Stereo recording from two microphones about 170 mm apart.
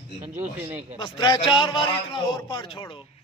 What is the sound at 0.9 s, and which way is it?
A man's voice, 25° left (ahead or behind).